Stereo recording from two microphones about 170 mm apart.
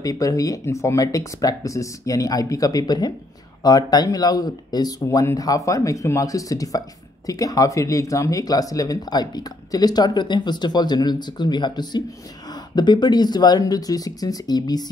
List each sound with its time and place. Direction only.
0.0 s speech: 20° left (ahead or behind)